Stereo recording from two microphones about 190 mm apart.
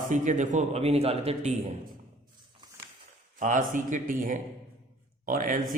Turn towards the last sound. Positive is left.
turn(degrees=-45)  # may be behind; listen again after turning